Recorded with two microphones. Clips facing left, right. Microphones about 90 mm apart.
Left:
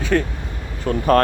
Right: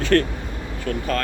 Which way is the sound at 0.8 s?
45° left (ahead or behind).